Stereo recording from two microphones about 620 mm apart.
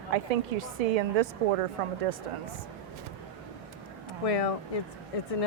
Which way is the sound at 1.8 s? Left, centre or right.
Right.